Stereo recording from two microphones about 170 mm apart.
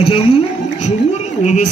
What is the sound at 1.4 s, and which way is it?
Speech, 45° left (ahead or behind).